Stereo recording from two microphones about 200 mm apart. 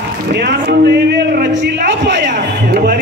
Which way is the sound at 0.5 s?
55° right (ahead or behind).